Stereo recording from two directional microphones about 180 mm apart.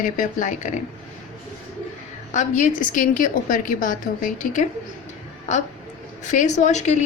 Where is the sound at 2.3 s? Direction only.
40° left (ahead or behind).